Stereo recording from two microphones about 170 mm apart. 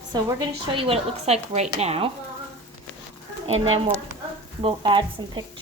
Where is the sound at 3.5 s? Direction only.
35° right (ahead or behind).